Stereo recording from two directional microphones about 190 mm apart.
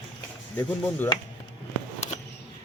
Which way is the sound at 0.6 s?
10° left (ahead or behind).